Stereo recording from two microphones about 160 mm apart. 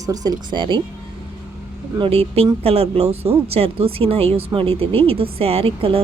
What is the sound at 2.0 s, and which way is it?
Speech, 35° right (ahead or behind).